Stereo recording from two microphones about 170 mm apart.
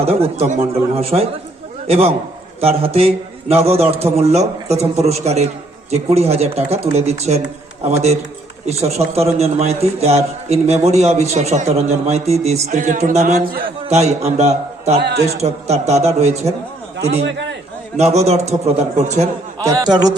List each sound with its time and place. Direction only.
0.0 s a man's voice: 35° right (ahead or behind)
13.4 s a man's voice: 60° right (ahead or behind)
13.8 s a man's voice: 40° right (ahead or behind)
17.9 s a man's voice: 40° right (ahead or behind)
19.5 s a man's voice: 20° right (ahead or behind)